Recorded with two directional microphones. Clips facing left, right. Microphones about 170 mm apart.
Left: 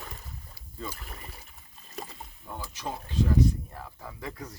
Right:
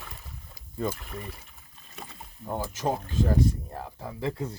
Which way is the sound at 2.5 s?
45° right (ahead or behind).